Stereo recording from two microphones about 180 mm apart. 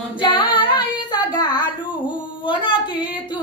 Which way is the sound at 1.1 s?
25° left (ahead or behind).